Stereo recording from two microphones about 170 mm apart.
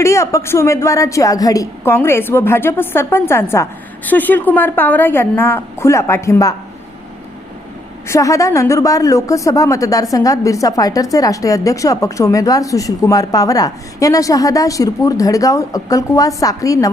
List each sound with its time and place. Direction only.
0.0 s a woman's voice: 15° left (ahead or behind)
8.0 s a woman's voice: 15° left (ahead or behind)